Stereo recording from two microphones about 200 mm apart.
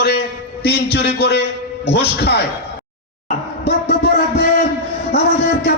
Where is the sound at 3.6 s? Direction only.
50° left (ahead or behind).